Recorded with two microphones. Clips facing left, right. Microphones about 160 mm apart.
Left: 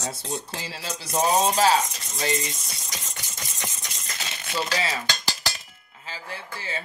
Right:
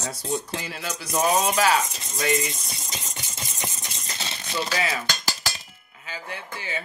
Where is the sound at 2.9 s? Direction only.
25° right (ahead or behind).